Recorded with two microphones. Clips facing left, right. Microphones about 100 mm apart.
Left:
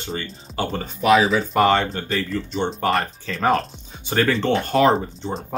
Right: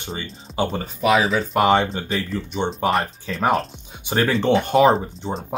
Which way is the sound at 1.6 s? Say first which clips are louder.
Right 1 dB; 15° right (ahead or behind).